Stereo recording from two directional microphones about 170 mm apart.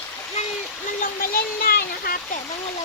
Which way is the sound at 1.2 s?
60° left (ahead or behind).